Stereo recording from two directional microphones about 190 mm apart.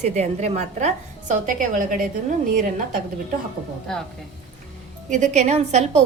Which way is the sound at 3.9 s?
5° left (ahead or behind).